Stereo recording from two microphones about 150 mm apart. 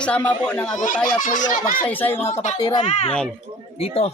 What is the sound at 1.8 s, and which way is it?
Speech, 10° left (ahead or behind).